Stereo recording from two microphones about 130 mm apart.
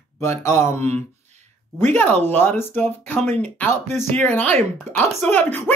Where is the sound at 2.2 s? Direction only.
15° left (ahead or behind).